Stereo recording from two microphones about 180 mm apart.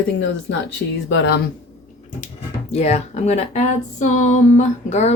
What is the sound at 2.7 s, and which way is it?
Speech, 35° left (ahead or behind).